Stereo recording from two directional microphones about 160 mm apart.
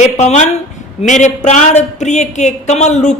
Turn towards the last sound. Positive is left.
turn(degrees=45)  # may be behind; listen again after turning